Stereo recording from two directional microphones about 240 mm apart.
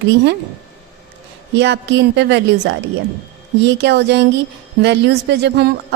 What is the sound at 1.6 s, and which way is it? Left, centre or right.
A woman's voice, right.